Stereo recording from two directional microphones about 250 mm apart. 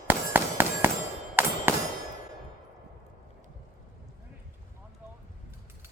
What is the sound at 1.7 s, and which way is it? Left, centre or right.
Clang, centre.